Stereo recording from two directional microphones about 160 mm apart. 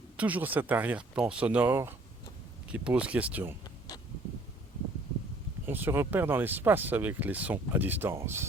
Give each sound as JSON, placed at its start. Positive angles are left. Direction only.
{"t": 0.2, "sound": "speech", "side_deg": -10}
{"t": 3.6, "sound": "a sound", "side_deg": 25}
{"t": 5.6, "sound": "speech", "side_deg": -15}